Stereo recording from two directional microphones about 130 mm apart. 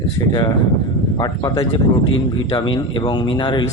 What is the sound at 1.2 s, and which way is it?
A man's voice, 30° left (ahead or behind).